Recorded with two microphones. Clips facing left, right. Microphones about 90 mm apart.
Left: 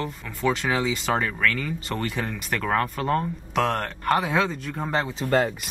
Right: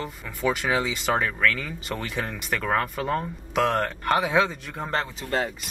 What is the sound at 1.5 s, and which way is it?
Speech, centre (ahead or behind).